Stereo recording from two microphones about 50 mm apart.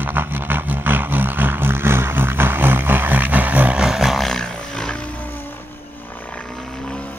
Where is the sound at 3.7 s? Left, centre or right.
Centre.